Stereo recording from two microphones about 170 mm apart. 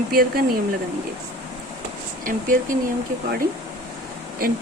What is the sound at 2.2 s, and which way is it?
Speech, 55° right (ahead or behind).